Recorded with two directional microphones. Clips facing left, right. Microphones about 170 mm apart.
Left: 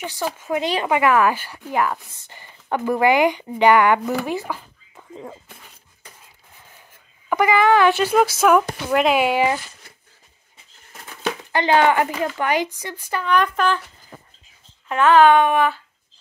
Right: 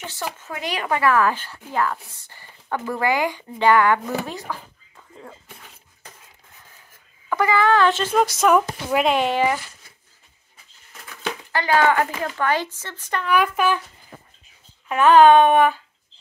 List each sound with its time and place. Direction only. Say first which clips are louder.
0.0 s speech: left 5 dB; 15° left (ahead or behind)
7.2 s speech: left 2 dB; 15° left (ahead or behind)
11.5 s speech: left 2 dB; 20° left (ahead or behind)
13.2 s speech: even; 5° right (ahead or behind)
14.9 s speech: right 1 dB; 15° right (ahead or behind)